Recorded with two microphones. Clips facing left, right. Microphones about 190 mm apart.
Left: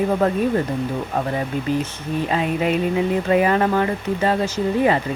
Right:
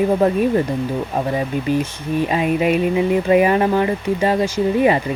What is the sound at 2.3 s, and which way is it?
Speech, 15° right (ahead or behind).